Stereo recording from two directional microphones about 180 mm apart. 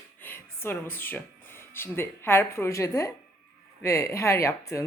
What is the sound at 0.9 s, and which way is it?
Speech, 10° left (ahead or behind).